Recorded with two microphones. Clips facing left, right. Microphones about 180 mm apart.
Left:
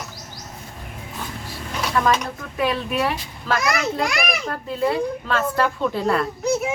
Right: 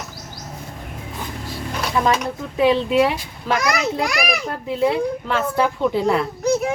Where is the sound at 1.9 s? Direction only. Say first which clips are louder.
Right 1 dB; 10° right (ahead or behind).